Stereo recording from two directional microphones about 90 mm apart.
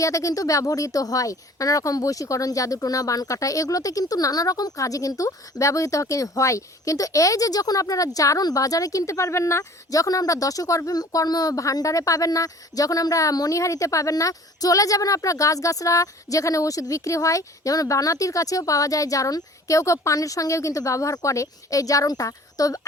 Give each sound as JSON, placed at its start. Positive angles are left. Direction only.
{"t": 0.0, "sound": "speech", "side_deg": 35}